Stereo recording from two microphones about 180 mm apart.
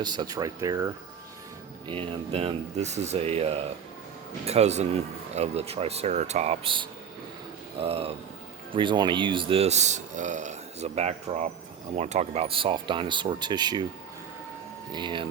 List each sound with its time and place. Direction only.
0.0 s speech: 20° right (ahead or behind)
1.9 s speech: 30° right (ahead or behind)
14.9 s speech: 25° right (ahead or behind)